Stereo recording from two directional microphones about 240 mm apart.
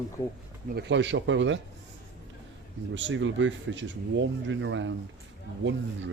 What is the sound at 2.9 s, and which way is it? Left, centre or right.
Speech, right.